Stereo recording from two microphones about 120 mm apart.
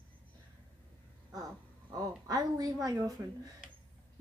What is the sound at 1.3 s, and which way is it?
A woman's voice, 30° right (ahead or behind).